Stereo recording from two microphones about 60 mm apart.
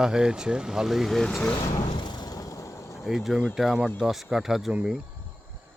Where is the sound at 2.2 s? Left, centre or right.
Left.